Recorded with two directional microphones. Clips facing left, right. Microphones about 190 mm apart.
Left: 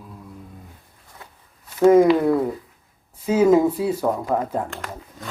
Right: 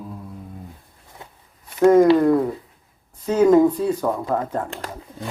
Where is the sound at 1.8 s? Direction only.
5° left (ahead or behind).